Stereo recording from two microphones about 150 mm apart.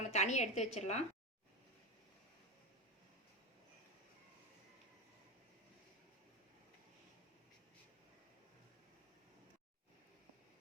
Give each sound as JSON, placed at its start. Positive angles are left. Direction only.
{"t": 0.1, "sound": "a woman's voice", "side_deg": 50}